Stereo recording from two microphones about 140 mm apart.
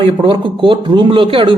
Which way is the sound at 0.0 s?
40° right (ahead or behind).